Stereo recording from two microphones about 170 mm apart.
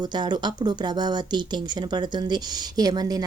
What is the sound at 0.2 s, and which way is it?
A woman's voice, 25° right (ahead or behind).